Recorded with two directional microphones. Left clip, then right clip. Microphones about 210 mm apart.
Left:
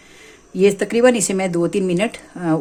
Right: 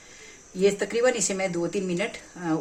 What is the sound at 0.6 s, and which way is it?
A woman's voice, 50° left (ahead or behind).